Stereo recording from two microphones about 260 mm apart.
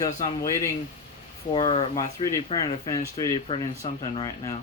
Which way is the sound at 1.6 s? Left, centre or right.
Centre.